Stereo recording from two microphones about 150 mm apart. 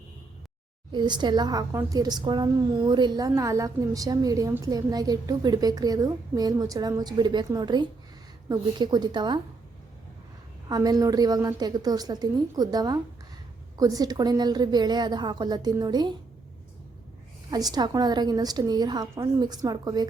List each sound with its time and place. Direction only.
0.9 s a woman's voice: 30° right (ahead or behind)
10.7 s a woman's voice: 25° right (ahead or behind)
17.5 s a woman's voice: 25° right (ahead or behind)